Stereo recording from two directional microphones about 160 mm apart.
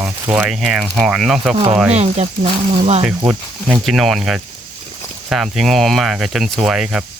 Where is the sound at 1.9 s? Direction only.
45° right (ahead or behind).